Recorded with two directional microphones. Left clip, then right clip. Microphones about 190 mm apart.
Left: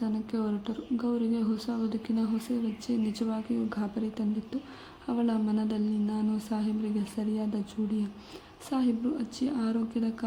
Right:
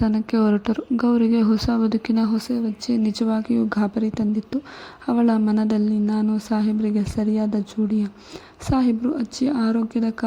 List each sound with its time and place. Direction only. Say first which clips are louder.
0.0 s speech: right 12 dB; 40° right (ahead or behind)
8.6 s speech: right 9 dB; 35° right (ahead or behind)